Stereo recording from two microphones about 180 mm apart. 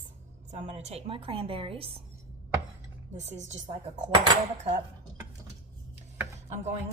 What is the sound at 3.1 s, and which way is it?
Speech, 40° right (ahead or behind).